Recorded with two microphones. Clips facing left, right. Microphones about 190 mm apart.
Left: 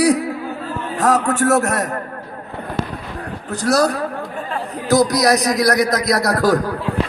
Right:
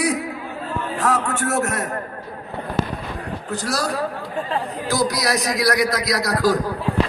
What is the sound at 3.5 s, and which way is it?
A man's voice, 45° left (ahead or behind).